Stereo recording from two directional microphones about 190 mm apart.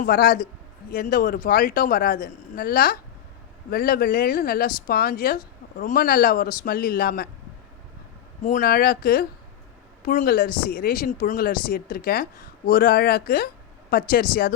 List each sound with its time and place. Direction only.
0.0 s speech: 50° left (ahead or behind)
8.4 s speech: 45° left (ahead or behind)